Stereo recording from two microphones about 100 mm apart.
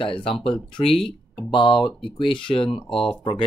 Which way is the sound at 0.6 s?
60° left (ahead or behind).